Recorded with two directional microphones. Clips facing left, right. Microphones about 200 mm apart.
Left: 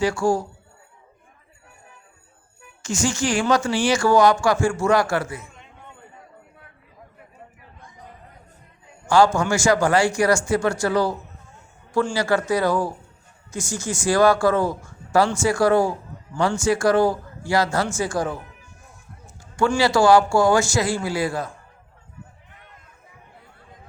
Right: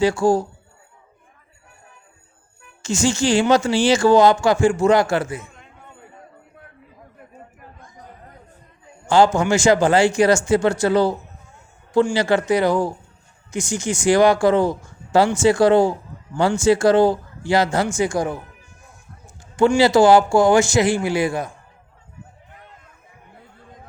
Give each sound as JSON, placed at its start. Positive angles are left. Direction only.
{"t": 0.0, "sound": "a man's voice", "side_deg": -20}
{"t": 2.8, "sound": "a man's voice", "side_deg": -25}
{"t": 9.0, "sound": "a man's voice", "side_deg": -20}